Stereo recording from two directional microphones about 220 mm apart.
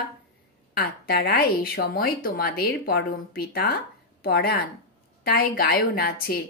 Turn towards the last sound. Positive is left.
turn(degrees=45)  # may be behind; listen again after turning